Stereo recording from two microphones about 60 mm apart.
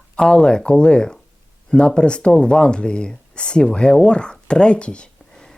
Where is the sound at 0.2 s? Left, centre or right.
Centre.